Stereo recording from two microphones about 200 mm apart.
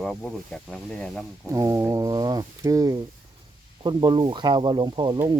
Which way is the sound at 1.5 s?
15° right (ahead or behind).